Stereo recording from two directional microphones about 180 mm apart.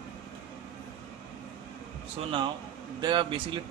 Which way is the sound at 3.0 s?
25° right (ahead or behind).